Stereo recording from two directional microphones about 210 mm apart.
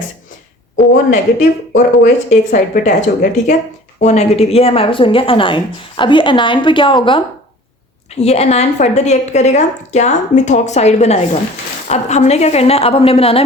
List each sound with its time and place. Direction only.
1.1 s a woman's voice: 35° left (ahead or behind)
8.2 s a woman's voice: 30° left (ahead or behind)